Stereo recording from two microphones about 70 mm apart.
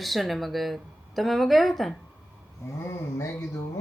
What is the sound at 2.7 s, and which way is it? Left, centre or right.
Speech, left.